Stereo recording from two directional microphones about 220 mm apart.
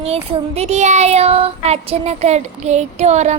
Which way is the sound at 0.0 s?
30° right (ahead or behind).